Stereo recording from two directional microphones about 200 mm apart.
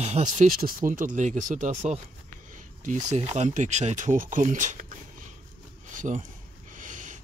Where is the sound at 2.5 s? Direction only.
40° right (ahead or behind).